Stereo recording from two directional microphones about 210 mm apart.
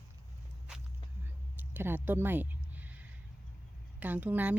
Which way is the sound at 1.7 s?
10° right (ahead or behind).